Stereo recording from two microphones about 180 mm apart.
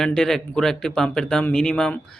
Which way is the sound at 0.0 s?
Centre (ahead or behind).